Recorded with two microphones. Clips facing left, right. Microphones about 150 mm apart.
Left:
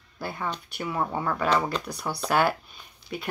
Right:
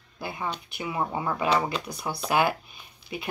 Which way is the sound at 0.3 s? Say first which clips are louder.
Even; 10° right (ahead or behind).